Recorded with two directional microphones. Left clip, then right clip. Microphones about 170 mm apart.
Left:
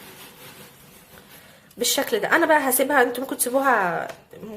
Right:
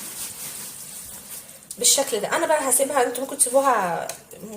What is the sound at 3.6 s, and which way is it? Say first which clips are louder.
Speech: left 4 dB; 20° left (ahead or behind).